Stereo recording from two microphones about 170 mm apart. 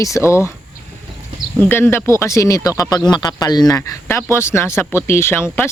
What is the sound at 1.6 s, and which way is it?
Speech, 15° left (ahead or behind).